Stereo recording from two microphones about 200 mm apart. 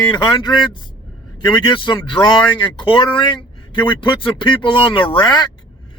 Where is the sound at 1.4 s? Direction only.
20° left (ahead or behind).